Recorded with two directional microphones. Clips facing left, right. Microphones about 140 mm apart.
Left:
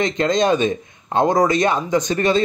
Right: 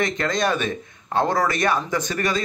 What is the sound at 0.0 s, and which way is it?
Speech, 20° left (ahead or behind).